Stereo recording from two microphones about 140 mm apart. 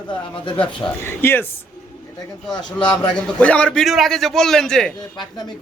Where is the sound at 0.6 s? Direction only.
15° left (ahead or behind).